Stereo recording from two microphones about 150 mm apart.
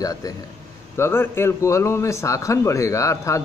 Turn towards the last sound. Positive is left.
turn(degrees=20)  # may be behind; listen again after turning